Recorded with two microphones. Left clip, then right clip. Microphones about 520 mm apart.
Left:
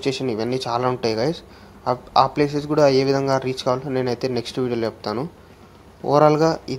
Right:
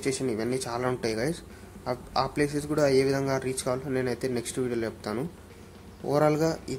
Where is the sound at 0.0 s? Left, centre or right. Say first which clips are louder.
Left 6 dB; right.